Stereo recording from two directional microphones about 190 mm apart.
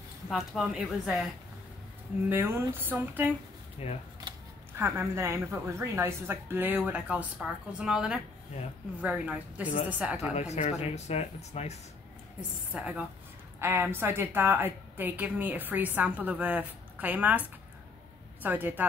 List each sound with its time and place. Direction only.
0.3 s speech: 5° right (ahead or behind)
2.2 s a woman's voice: 10° right (ahead or behind)
3.8 s speech: 35° left (ahead or behind)
4.7 s a woman's voice: 15° right (ahead or behind)
10.3 s speech: 35° left (ahead or behind)
12.4 s a woman's voice: 5° right (ahead or behind)